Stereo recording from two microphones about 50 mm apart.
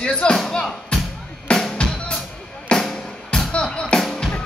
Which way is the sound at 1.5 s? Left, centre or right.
Centre.